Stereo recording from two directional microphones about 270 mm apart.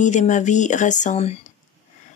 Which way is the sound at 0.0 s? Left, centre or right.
Left.